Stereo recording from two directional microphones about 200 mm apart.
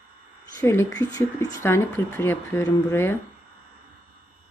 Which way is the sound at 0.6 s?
15° left (ahead or behind).